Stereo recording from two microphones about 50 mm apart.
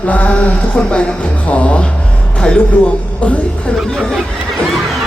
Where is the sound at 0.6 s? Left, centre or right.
Left.